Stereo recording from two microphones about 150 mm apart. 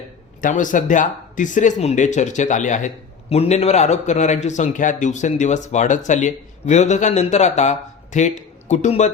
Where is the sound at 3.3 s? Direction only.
45° left (ahead or behind).